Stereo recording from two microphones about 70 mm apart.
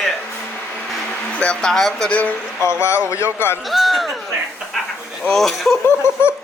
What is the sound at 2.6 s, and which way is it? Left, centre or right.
Speech, left.